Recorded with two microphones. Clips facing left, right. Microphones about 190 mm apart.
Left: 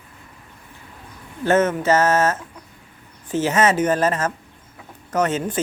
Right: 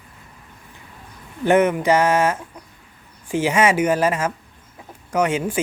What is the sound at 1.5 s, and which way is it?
Speech, 15° right (ahead or behind).